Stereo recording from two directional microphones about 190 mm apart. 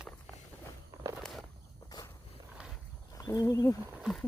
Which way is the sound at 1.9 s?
20° left (ahead or behind).